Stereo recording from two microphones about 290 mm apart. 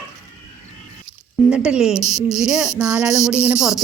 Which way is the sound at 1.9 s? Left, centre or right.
Left.